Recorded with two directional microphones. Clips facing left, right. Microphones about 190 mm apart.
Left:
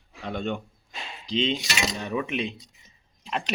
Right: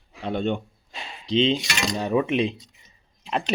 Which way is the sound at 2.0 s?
35° right (ahead or behind).